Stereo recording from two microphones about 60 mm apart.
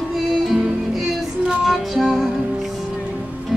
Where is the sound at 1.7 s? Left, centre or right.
Centre.